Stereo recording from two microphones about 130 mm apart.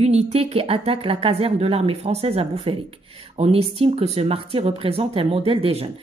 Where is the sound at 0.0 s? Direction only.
55° right (ahead or behind).